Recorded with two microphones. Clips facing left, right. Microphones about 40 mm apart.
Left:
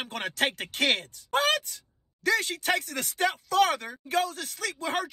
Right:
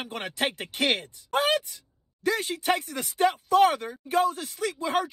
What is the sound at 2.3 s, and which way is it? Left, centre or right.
Speech, left.